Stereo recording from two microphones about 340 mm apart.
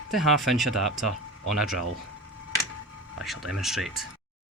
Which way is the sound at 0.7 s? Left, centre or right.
Right.